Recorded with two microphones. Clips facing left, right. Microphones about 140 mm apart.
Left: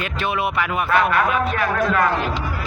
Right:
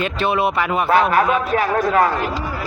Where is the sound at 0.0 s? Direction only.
30° right (ahead or behind).